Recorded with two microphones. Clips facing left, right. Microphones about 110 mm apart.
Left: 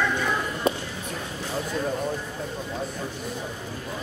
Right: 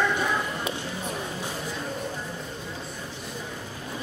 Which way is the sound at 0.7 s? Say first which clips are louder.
Left 7 dB; 40° left (ahead or behind).